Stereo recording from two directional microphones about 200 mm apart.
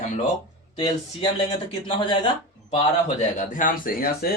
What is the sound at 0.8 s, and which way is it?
Speech, 25° left (ahead or behind).